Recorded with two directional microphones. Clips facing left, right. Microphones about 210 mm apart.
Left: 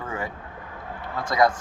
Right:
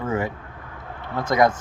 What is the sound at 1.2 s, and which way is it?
Speech, 25° right (ahead or behind).